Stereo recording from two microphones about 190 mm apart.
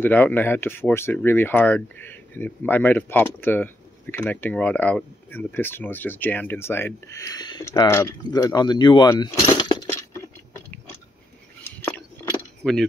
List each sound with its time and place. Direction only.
0.0 s speech: 10° left (ahead or behind)
11.8 s keys jangling: 10° left (ahead or behind)